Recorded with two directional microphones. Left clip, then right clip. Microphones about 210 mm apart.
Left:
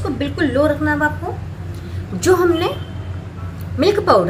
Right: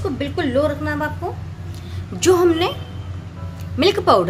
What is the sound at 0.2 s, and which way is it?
Speech, 50° right (ahead or behind).